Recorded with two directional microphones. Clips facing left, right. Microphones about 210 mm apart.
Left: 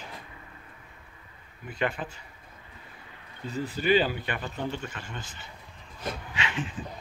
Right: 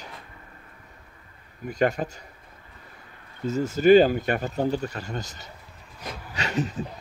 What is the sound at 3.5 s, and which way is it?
Speech, 45° right (ahead or behind).